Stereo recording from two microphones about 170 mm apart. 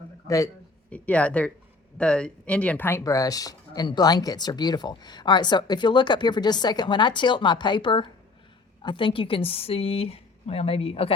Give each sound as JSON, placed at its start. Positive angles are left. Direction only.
{"t": 0.3, "sound": "speech", "side_deg": 20}
{"t": 0.9, "sound": "a woman's voice", "side_deg": 10}